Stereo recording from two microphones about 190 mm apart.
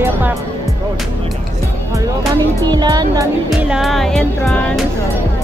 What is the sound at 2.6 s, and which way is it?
Speech, 20° right (ahead or behind).